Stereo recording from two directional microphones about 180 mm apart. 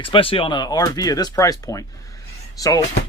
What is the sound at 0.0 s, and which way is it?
Speech, 30° left (ahead or behind).